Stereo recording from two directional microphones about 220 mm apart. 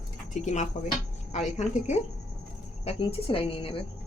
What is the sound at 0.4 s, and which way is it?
A woman's voice, 35° left (ahead or behind).